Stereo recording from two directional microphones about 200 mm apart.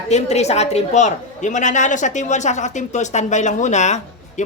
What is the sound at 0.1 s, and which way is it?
A woman's voice, 35° left (ahead or behind).